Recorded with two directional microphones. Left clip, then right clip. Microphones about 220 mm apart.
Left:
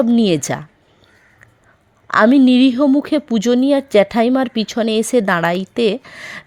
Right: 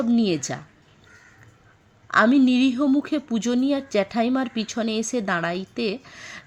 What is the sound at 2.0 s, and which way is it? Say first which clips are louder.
A woman's voice: left 6 dB; 40° left (ahead or behind).